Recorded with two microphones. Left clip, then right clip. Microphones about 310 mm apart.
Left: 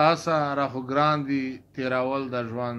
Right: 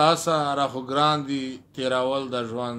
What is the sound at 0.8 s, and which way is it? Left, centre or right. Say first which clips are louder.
Speech: even; right.